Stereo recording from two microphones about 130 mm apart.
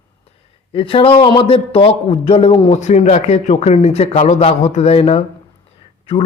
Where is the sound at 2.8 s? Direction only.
65° left (ahead or behind).